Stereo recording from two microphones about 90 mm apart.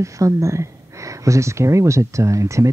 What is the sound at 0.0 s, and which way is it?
Speech, 35° right (ahead or behind).